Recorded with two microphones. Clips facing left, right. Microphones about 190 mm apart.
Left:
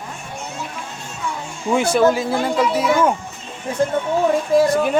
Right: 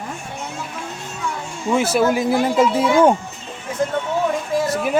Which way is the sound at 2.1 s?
20° right (ahead or behind).